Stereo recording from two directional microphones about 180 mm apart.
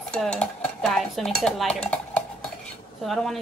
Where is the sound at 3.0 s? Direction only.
Centre (ahead or behind).